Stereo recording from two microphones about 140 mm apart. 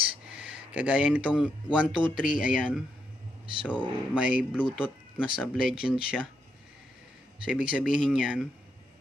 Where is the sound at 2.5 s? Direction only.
5° right (ahead or behind).